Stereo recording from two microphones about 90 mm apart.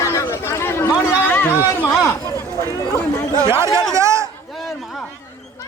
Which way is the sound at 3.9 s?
35° right (ahead or behind).